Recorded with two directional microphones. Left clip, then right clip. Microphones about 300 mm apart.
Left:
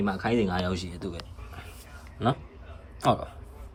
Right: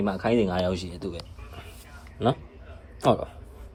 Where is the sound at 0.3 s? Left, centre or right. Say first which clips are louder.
Right 4 dB; centre.